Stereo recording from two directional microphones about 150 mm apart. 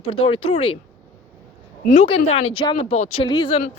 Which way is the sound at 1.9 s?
40° left (ahead or behind).